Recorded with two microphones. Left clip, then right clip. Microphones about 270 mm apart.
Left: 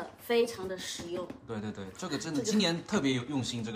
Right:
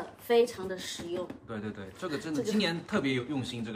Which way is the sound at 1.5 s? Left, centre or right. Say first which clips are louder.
Even; left.